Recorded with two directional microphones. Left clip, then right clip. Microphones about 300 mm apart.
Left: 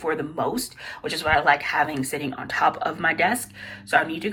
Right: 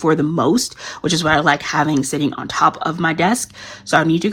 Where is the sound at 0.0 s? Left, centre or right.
Right.